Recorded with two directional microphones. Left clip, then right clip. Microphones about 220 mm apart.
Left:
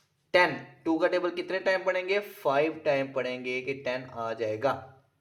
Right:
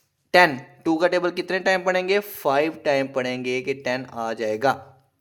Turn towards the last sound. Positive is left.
turn(degrees=-45)  # may be behind; listen again after turning